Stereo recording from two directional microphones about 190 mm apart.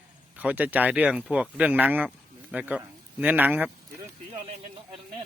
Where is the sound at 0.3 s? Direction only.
10° right (ahead or behind).